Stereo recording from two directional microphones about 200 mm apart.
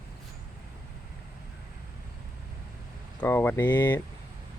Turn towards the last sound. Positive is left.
turn(degrees=10)  # may be behind; listen again after turning